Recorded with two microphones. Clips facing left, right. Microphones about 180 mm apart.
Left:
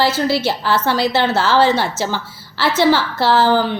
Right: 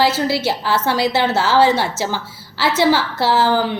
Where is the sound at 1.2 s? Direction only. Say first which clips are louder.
Even; 20° right (ahead or behind).